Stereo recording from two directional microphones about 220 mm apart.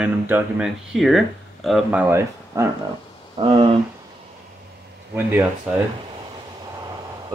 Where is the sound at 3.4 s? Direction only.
25° right (ahead or behind).